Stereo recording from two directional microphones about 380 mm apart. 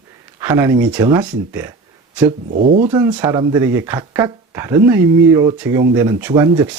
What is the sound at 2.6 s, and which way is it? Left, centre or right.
Speech, centre.